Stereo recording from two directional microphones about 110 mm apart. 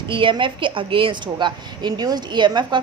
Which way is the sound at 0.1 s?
50° right (ahead or behind).